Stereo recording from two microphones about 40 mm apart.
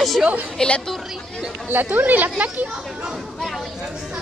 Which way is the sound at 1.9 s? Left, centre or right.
Right.